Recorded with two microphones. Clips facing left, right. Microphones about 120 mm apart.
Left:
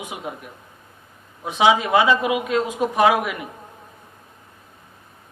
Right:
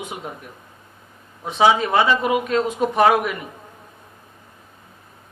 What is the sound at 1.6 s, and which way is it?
A man's voice, 10° left (ahead or behind).